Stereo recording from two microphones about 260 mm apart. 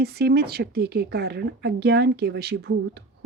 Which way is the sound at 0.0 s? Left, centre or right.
Right.